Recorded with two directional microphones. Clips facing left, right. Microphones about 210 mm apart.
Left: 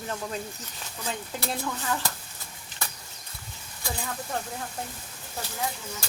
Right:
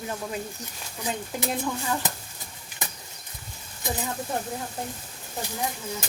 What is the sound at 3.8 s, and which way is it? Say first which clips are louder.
Speech: right 4 dB; 20° right (ahead or behind).